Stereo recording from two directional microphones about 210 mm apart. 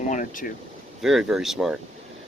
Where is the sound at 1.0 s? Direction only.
Centre (ahead or behind).